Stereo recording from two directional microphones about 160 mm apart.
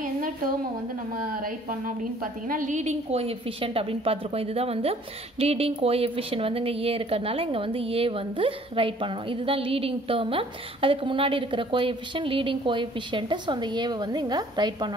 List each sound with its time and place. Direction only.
1.4 s a woman's voice: 60° right (ahead or behind); by 14.9 s 25° right (ahead or behind)